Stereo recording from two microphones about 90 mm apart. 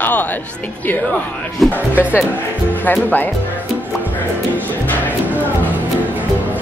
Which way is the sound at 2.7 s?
20° left (ahead or behind).